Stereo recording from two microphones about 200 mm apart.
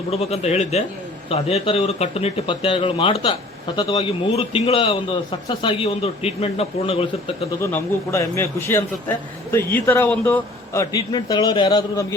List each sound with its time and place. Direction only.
0.1 s a man's voice: 30° left (ahead or behind)
7.6 s a man's voice: 15° left (ahead or behind)